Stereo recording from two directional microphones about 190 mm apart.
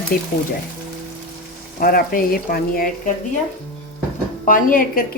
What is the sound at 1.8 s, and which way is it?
A woman's voice, 50° left (ahead or behind).